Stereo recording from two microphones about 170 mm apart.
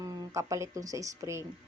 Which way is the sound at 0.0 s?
20° right (ahead or behind).